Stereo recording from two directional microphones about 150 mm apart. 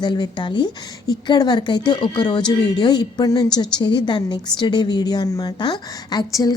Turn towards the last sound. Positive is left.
turn(degrees=25)  # may be behind; listen again after turning